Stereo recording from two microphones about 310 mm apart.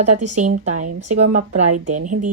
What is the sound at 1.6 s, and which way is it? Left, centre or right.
Speech, right.